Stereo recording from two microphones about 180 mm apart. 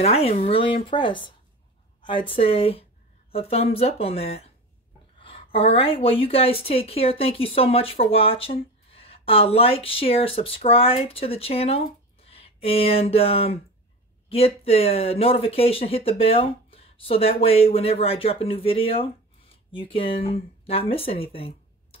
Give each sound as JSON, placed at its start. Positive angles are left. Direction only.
{"t": 0.0, "sound": "a woman's voice", "side_deg": 35}
{"t": 2.0, "sound": "a sound", "side_deg": 30}
{"t": 2.3, "sound": "a woman's voice", "side_deg": 30}